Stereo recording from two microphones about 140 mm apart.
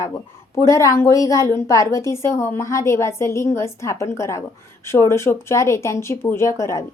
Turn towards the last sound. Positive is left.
turn(degrees=20)  # may be behind; listen again after turning